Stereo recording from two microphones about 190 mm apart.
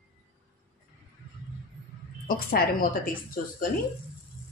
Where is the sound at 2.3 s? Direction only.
50° left (ahead or behind).